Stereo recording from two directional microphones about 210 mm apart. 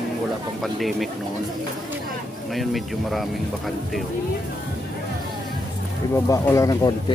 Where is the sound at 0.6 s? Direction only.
Centre (ahead or behind).